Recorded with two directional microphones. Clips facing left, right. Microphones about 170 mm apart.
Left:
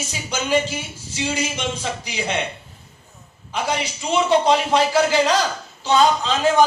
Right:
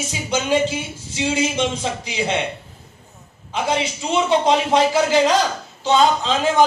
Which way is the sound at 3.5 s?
20° right (ahead or behind).